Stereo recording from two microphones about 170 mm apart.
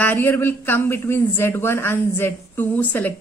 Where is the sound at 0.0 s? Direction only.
10° left (ahead or behind).